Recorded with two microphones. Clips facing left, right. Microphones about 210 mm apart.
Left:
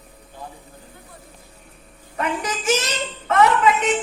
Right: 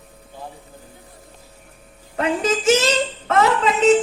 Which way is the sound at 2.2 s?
30° right (ahead or behind).